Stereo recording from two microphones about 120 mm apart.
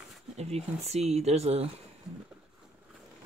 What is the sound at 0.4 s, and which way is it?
Speech, 60° right (ahead or behind).